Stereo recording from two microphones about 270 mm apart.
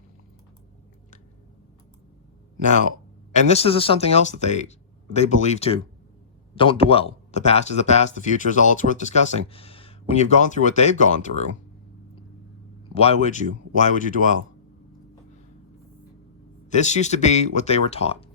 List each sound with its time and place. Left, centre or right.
3.3 s speech: left
12.9 s speech: left
16.6 s speech: left